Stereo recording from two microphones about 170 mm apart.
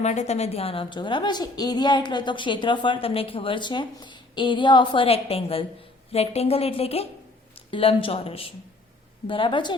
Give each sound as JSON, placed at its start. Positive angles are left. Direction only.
{"t": 0.0, "sound": "a woman's voice", "side_deg": 40}